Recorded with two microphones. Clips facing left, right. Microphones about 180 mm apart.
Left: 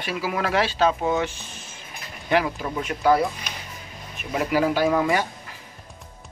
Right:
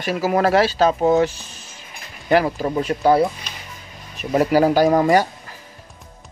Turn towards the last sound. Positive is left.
turn(degrees=-40)  # may be behind; listen again after turning